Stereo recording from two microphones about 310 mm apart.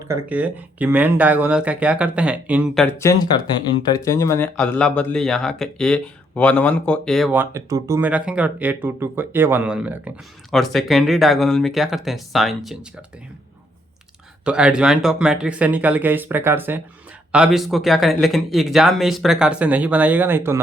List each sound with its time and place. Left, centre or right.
0.1 s speech: centre
14.4 s speech: centre